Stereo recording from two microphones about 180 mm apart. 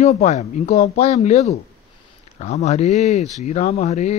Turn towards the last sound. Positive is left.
turn(degrees=35)  # may be behind; listen again after turning